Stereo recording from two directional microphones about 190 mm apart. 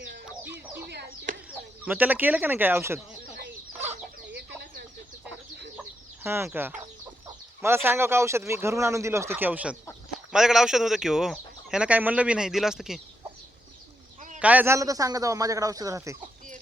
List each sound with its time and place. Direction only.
0.9 s a sound: 60° right (ahead or behind)
1.5 s speech: 10° right (ahead or behind)
4.4 s chicken: 60° right (ahead or behind)
6.2 s speech: 15° right (ahead or behind)
14.3 s speech: 10° right (ahead or behind)